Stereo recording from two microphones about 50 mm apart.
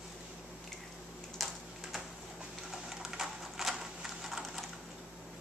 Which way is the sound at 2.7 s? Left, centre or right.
Centre.